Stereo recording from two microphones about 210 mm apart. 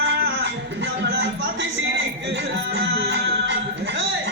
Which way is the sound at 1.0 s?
55° right (ahead or behind).